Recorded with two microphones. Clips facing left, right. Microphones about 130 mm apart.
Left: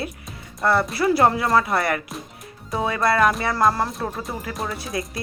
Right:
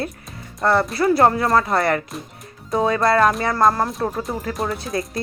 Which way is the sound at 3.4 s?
45° right (ahead or behind).